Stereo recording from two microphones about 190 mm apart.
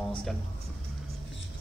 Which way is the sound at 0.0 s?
5° left (ahead or behind).